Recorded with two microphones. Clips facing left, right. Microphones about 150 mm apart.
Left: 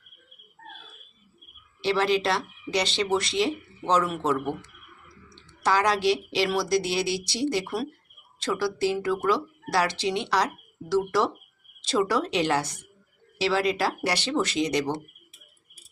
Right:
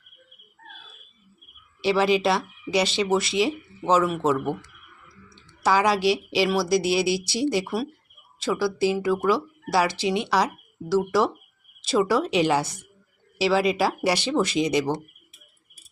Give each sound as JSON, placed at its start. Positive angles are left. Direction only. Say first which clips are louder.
{"t": 1.8, "sound": "speech", "louder": "right 3 dB", "side_deg": -10}
{"t": 5.3, "sound": "speech", "louder": "right 3 dB", "side_deg": -10}